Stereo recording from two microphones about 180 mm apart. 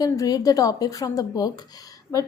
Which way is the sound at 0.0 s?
20° left (ahead or behind).